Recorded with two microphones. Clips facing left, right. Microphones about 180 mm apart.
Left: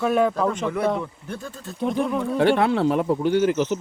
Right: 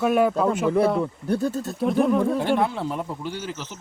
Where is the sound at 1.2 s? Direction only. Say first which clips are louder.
Right 10 dB; 40° right (ahead or behind).